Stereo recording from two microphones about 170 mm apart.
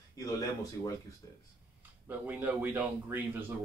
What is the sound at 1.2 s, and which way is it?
Speech, 25° left (ahead or behind).